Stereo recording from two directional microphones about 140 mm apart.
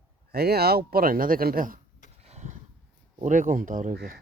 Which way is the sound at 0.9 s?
90° right.